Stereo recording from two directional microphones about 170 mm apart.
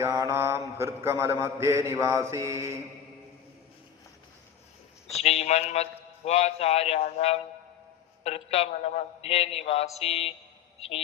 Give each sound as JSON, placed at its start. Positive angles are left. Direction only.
{"t": 0.0, "sound": "mantra", "side_deg": -15}
{"t": 5.0, "sound": "a man's voice", "side_deg": 40}